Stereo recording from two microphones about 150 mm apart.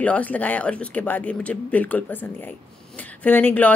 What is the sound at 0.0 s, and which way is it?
A woman's voice, 10° left (ahead or behind).